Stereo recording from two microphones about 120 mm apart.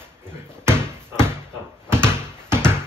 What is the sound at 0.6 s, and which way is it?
Basketball bounce, 20° right (ahead or behind).